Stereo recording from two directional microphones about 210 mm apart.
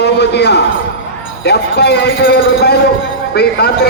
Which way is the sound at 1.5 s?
50° left (ahead or behind).